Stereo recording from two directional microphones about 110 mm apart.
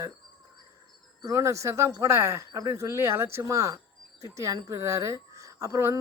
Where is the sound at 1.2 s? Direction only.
30° right (ahead or behind).